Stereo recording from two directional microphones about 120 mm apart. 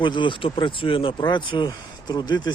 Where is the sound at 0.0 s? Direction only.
45° left (ahead or behind).